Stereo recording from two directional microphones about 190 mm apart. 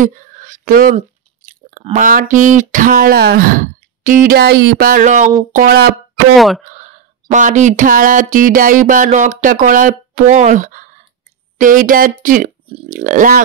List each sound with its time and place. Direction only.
0.0 s speech: 45° right (ahead or behind)
6.3 s speech: centre (ahead or behind)
6.6 s speech: 40° right (ahead or behind)